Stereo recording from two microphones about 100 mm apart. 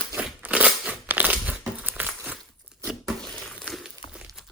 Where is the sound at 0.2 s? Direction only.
10° right (ahead or behind).